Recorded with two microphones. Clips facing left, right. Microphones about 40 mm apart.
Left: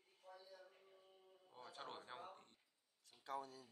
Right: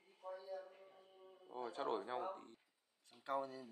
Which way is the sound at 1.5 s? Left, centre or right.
Centre.